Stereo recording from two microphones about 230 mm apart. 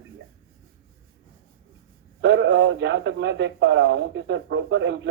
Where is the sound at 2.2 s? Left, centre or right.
Right.